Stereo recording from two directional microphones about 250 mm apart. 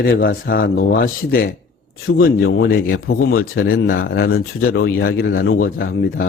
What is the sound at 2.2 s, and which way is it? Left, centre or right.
Speech, left.